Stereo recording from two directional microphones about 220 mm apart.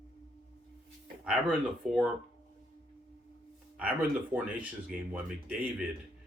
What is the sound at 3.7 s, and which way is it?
Speech, 5° right (ahead or behind).